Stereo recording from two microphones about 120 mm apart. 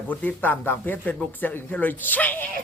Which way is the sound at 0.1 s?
15° left (ahead or behind).